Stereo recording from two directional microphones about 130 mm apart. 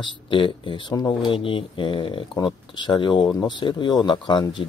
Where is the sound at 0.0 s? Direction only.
40° left (ahead or behind).